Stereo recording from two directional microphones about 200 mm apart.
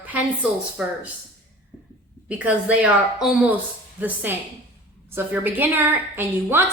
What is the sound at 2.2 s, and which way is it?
A woman's voice, 5° right (ahead or behind).